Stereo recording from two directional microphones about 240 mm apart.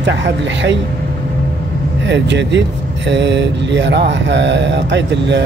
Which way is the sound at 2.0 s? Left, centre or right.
Right.